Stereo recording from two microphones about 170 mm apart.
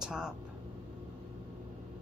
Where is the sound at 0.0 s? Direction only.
5° right (ahead or behind).